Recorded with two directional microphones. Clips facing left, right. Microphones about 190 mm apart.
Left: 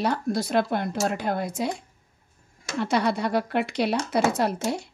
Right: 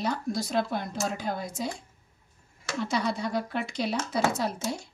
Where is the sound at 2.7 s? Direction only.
65° left (ahead or behind).